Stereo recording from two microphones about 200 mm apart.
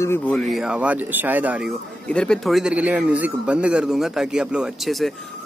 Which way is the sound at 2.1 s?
5° left (ahead or behind).